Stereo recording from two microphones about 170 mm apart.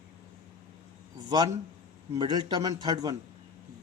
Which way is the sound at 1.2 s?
25° right (ahead or behind).